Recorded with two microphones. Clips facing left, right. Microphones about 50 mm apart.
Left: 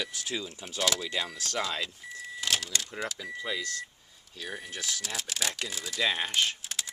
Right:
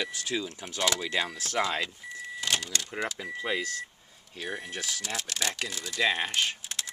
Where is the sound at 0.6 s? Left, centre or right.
Centre.